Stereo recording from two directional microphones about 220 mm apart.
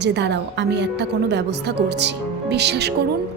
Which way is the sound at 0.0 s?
50° right (ahead or behind).